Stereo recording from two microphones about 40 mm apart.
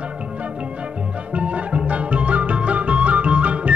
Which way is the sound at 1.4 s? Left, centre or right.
Right.